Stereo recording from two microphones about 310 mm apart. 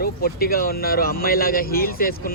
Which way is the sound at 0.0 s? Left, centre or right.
Left.